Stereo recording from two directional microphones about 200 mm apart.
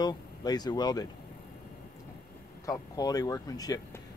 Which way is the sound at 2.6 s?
20° left (ahead or behind).